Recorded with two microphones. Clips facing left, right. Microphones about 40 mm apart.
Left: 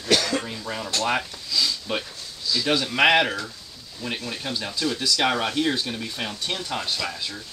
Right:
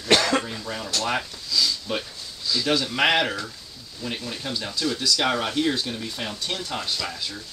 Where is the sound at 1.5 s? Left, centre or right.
Centre.